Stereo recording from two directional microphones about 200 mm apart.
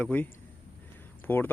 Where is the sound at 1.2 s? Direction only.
10° left (ahead or behind).